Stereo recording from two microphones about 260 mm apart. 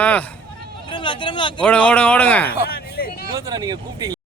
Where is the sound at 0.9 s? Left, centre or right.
Centre.